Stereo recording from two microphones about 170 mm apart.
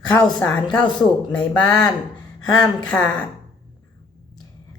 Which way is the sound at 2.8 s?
5° left (ahead or behind).